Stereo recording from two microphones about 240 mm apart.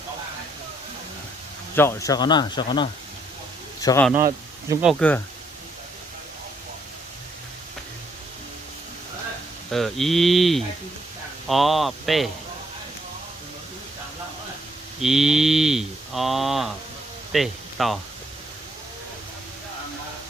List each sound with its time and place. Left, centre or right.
1.7 s speech: centre
4.7 s speech: centre
9.7 s speech: centre
15.0 s speech: centre